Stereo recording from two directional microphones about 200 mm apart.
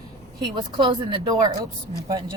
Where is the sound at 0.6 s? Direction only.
25° right (ahead or behind).